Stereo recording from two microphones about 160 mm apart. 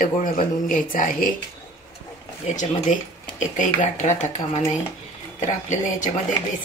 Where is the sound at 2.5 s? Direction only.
50° left (ahead or behind).